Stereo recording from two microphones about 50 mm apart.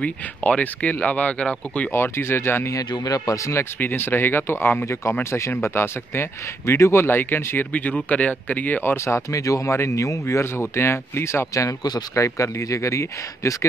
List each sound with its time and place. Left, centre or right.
0.0 s speech: left
1.9 s speech: left
3.8 s speech: left
5.3 s speech: left
7.1 s speech: left
7.7 s speech: left
8.9 s speech: left
12.2 s speech: left